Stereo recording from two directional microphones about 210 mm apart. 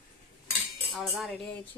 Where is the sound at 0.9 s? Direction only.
Centre (ahead or behind).